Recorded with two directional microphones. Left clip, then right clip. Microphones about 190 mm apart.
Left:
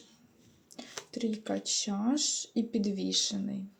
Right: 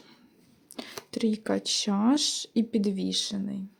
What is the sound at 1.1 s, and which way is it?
Speech, 40° right (ahead or behind).